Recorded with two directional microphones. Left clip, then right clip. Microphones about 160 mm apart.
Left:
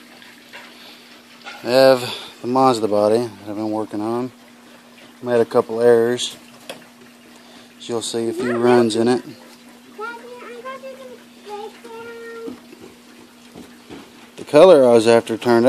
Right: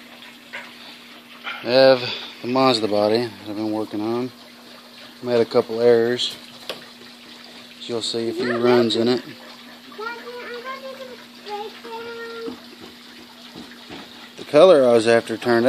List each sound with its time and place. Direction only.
1.6 s speech: 15° left (ahead or behind); by 6.3 s 35° left (ahead or behind)
7.8 s speech: 40° left (ahead or behind)
14.5 s speech: 40° left (ahead or behind)